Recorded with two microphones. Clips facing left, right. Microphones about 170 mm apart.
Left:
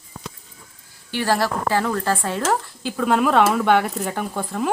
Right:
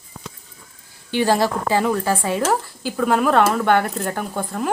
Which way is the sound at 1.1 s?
20° right (ahead or behind).